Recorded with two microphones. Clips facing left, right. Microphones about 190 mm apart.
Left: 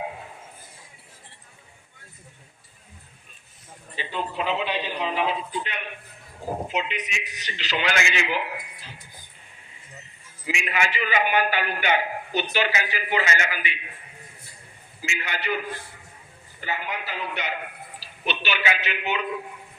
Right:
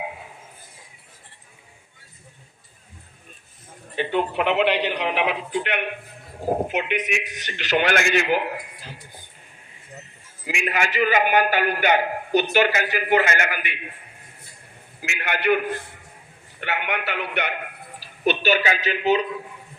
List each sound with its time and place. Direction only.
3.9 s a man's voice: 60° right (ahead or behind)
10.4 s a man's voice: 50° right (ahead or behind)
15.0 s a man's voice: 60° right (ahead or behind)
18.0 s a woman's voice: 45° right (ahead or behind)